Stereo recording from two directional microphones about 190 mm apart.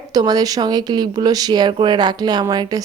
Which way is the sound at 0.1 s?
20° right (ahead or behind).